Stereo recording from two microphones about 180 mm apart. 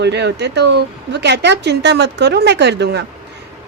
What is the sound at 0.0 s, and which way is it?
Speech, 70° right (ahead or behind).